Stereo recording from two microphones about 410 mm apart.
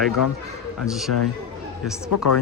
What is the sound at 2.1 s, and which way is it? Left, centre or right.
Speech, left.